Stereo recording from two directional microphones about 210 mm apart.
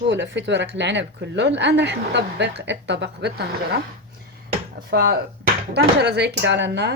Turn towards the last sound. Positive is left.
turn(degrees=-55)  # may be behind; listen again after turning